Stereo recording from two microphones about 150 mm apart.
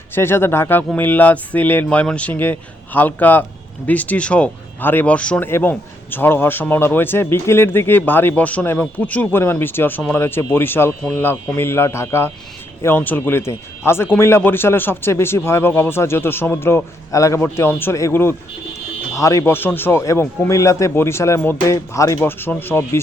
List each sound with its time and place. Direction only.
0.1 s speech: 15° left (ahead or behind)